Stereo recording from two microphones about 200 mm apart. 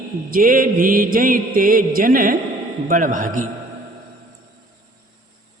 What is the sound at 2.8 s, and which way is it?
Speech, 40° right (ahead or behind).